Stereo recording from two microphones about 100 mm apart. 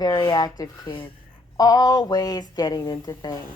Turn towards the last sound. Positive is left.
turn(degrees=40)  # may be behind; listen again after turning